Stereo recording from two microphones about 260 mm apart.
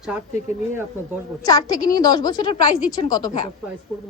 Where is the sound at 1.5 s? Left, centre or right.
Centre.